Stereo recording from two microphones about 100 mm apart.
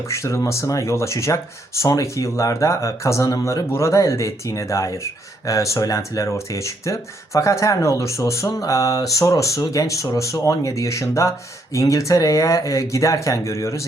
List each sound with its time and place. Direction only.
0.1 s speech: 30° left (ahead or behind)